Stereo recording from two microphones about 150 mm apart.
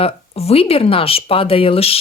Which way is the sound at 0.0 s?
40° left (ahead or behind).